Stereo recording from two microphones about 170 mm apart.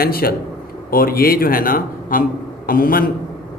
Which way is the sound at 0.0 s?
60° left (ahead or behind).